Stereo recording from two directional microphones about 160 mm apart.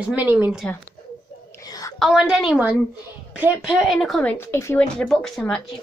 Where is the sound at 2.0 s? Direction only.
5° right (ahead or behind); by 4.8 s 15° left (ahead or behind).